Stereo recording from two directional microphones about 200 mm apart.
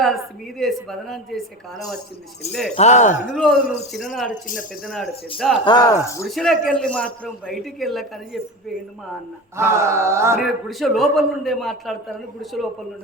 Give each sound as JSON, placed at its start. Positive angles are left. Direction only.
{"t": 0.6, "sound": "a man's voice", "side_deg": 0}
{"t": 2.5, "sound": "a man's voice", "side_deg": 0}
{"t": 2.7, "sound": "speech", "side_deg": 35}
{"t": 3.3, "sound": "a man's voice", "side_deg": 0}
{"t": 5.4, "sound": "a man's voice", "side_deg": 0}
{"t": 5.6, "sound": "speech", "side_deg": 20}
{"t": 6.2, "sound": "a man's voice", "side_deg": 0}
{"t": 9.6, "sound": "a sound", "side_deg": -15}
{"t": 10.4, "sound": "a man's voice", "side_deg": 0}